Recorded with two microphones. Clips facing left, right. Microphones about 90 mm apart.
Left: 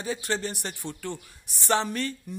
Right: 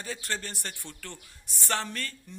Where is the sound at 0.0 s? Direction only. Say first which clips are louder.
Left 6 dB; 15° left (ahead or behind).